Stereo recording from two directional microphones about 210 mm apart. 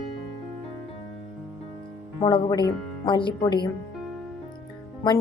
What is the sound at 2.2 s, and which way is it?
Speech, 25° left (ahead or behind).